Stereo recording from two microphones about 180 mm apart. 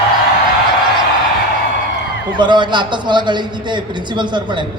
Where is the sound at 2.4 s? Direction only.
25° right (ahead or behind).